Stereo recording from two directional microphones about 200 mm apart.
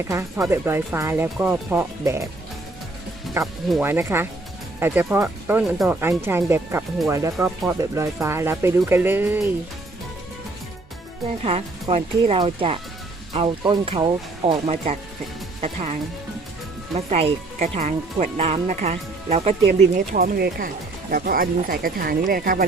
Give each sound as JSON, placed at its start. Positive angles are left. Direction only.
{"t": 0.1, "sound": "speech", "side_deg": -15}
{"t": 3.4, "sound": "speech", "side_deg": -15}
{"t": 11.3, "sound": "speech", "side_deg": -30}
{"t": 17.1, "sound": "speech", "side_deg": -30}
{"t": 20.1, "sound": "speech", "side_deg": -50}